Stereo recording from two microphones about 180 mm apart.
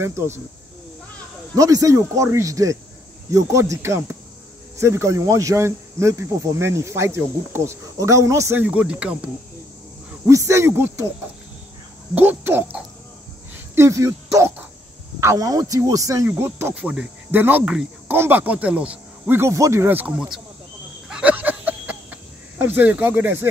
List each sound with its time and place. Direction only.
0.0 s speech: 15° right (ahead or behind)
1.5 s speech: 20° right (ahead or behind)
10.2 s speech: 15° right (ahead or behind)
12.2 s speech: 10° right (ahead or behind)
21.1 s a sound: 5° right (ahead or behind)